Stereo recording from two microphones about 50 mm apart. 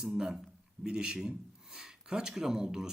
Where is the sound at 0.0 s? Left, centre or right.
Centre.